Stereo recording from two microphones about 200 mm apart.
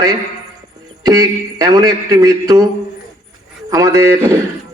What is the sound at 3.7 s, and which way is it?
Speech, 15° right (ahead or behind).